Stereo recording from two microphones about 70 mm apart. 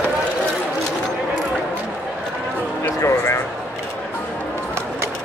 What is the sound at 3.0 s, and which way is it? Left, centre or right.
Speech, left.